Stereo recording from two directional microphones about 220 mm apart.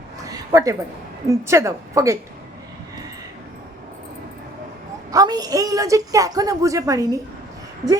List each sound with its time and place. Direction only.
0.3 s a sound: 15° right (ahead or behind)
1.3 s a woman's voice: 10° right (ahead or behind)
5.1 s a woman's voice: 15° right (ahead or behind)